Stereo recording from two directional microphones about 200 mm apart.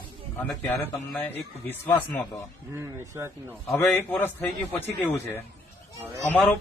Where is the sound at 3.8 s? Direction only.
10° left (ahead or behind).